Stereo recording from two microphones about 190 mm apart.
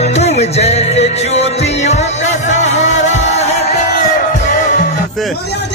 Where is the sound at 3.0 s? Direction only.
35° left (ahead or behind).